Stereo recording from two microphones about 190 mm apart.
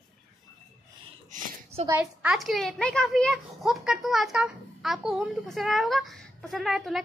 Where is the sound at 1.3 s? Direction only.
35° right (ahead or behind).